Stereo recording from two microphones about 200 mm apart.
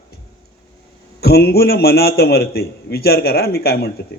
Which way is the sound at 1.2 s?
55° left (ahead or behind).